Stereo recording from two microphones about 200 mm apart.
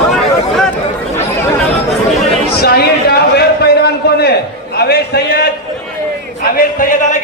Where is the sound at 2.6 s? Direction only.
50° left (ahead or behind).